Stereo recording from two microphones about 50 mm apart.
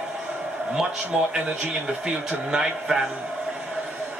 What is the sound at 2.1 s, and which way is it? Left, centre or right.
A man's voice, centre.